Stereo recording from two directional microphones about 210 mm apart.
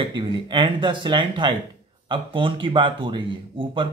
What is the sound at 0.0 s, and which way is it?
Speech, 25° right (ahead or behind).